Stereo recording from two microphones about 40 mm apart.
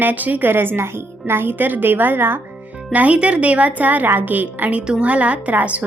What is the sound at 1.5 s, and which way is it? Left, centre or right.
Speech, right.